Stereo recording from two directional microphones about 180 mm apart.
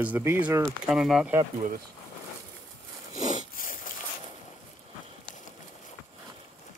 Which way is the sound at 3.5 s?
50° left (ahead or behind).